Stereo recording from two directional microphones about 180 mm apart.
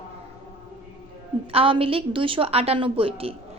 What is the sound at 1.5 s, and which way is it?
A woman's voice, 30° right (ahead or behind).